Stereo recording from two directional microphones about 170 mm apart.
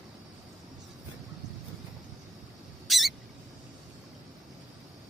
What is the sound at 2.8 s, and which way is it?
Mouse, centre (ahead or behind).